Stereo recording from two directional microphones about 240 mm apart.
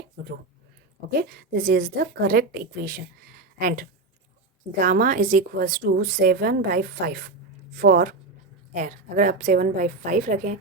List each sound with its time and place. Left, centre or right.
1.1 s a woman's voice: right